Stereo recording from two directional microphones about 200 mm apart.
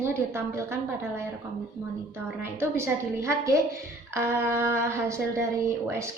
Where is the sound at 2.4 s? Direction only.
10° right (ahead or behind).